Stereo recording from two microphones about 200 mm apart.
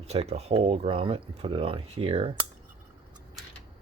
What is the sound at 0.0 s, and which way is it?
Speech, 30° right (ahead or behind).